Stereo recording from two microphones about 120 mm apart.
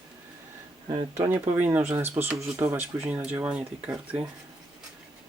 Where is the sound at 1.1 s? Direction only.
20° right (ahead or behind).